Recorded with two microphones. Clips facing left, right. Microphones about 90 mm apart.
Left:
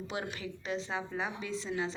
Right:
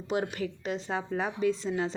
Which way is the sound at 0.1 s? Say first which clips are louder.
Right 11 dB; 45° right (ahead or behind).